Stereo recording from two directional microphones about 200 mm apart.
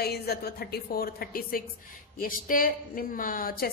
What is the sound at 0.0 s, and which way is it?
A woman's voice, 50° left (ahead or behind).